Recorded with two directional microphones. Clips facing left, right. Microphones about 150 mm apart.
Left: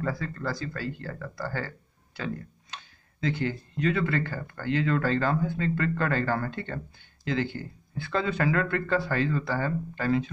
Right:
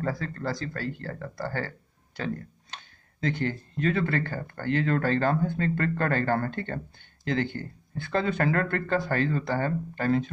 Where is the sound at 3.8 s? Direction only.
50° right (ahead or behind).